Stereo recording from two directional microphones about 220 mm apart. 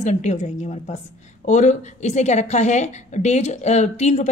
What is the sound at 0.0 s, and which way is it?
A woman's voice, 35° left (ahead or behind).